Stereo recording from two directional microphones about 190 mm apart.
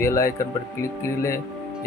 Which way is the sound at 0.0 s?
15° left (ahead or behind).